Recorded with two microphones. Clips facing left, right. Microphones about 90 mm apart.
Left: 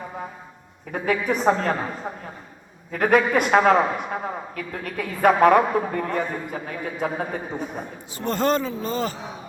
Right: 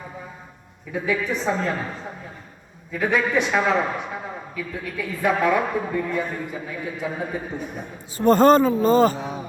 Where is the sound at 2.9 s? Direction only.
50° left (ahead or behind).